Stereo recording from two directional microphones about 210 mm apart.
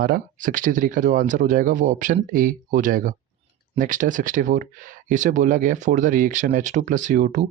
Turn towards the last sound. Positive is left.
turn(degrees=-35)  # may be behind; listen again after turning